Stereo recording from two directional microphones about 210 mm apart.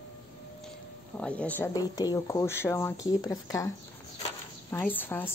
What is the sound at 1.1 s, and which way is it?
Speech, 5° left (ahead or behind).